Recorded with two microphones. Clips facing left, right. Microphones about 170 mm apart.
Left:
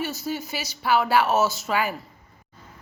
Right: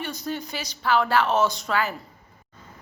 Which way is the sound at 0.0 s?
5° left (ahead or behind).